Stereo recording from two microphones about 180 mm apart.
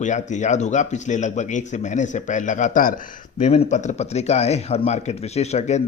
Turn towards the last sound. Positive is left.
turn(degrees=40)  # may be behind; listen again after turning